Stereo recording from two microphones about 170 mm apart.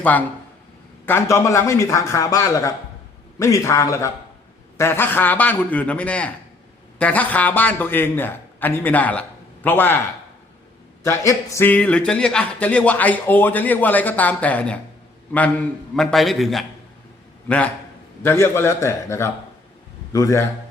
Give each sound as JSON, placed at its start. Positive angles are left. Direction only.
{"t": 0.0, "sound": "speech", "side_deg": 10}
{"t": 11.0, "sound": "a man's voice", "side_deg": 20}
{"t": 18.2, "sound": "speech", "side_deg": 15}